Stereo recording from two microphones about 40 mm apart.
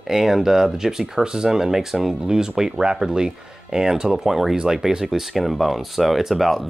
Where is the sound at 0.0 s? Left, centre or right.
Centre.